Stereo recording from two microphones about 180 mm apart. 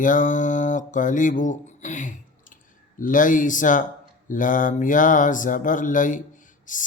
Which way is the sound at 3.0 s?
45° left (ahead or behind).